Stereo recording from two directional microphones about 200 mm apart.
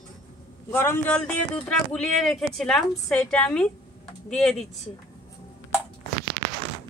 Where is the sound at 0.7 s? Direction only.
10° left (ahead or behind).